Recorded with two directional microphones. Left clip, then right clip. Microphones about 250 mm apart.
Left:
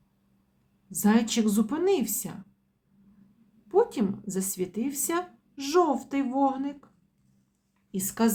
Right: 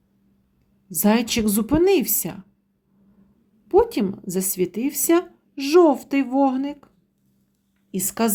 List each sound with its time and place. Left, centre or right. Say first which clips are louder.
0.9 s speech: right 5 dB; right
3.7 s a woman's voice: right 6 dB; right